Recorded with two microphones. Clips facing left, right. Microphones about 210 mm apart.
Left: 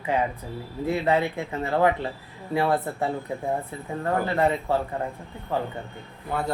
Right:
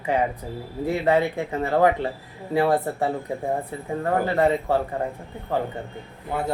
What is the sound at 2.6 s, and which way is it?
Speech, 35° right (ahead or behind).